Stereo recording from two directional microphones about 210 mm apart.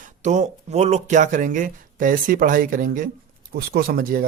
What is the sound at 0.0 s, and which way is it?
Speech, 35° right (ahead or behind).